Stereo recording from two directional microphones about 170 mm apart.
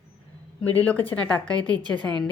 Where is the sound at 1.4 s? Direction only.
25° right (ahead or behind).